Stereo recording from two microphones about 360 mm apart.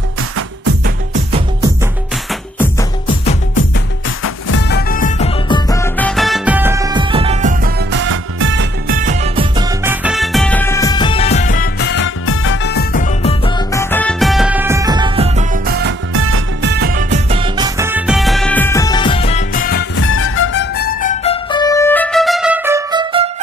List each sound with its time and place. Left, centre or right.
0.8 s music: centre
2.6 s music: centre
4.5 s music: left
13.8 s music: centre